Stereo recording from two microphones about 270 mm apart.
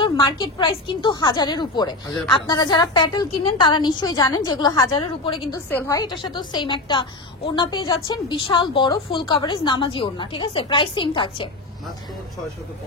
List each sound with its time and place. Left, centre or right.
0.0 s a woman's voice: centre